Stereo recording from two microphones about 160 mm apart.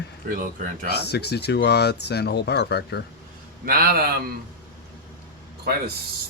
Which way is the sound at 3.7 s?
70° right (ahead or behind).